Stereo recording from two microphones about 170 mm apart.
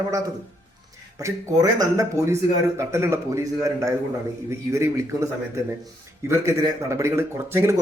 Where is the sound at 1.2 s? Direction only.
20° right (ahead or behind).